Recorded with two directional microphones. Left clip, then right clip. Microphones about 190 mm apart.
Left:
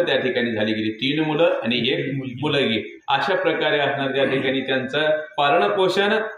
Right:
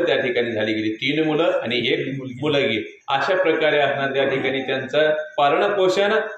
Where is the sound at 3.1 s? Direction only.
Centre (ahead or behind).